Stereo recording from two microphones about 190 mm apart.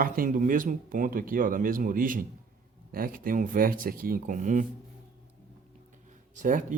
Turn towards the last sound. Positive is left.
turn(degrees=-45)  # may be behind; listen again after turning